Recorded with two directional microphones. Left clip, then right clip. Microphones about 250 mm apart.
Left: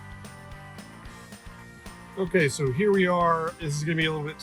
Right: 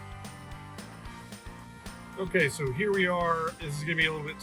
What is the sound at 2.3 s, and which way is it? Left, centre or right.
Speech, left.